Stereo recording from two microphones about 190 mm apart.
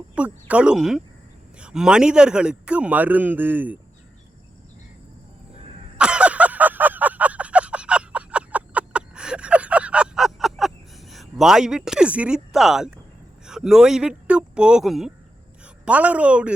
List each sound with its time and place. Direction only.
0.2 s a man's voice: 5° right (ahead or behind)
6.0 s a sound: 5° right (ahead or behind)
13.4 s a woman's voice: 5° right (ahead or behind)